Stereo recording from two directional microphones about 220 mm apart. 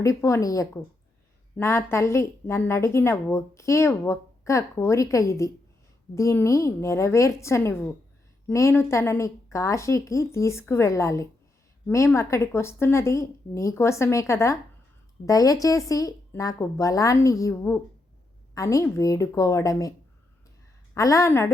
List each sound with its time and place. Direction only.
0.0 s a woman's voice: 15° left (ahead or behind)
20.9 s a woman's voice: 15° left (ahead or behind)